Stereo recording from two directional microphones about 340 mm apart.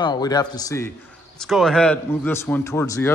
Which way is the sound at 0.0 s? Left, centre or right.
Centre.